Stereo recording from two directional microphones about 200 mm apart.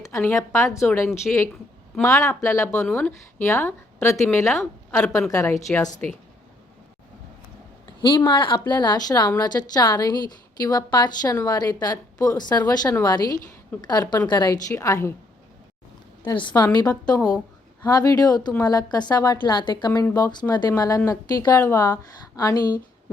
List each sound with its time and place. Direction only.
0.0 s a woman's voice: 10° left (ahead or behind)
2.0 s a woman's voice: 15° left (ahead or behind)
8.0 s a woman's voice: 20° left (ahead or behind)
16.2 s a woman's voice: 25° left (ahead or behind)
17.8 s a woman's voice: 20° left (ahead or behind)